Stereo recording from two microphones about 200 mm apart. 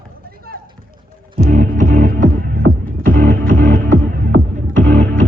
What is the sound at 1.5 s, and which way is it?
Music, 40° right (ahead or behind).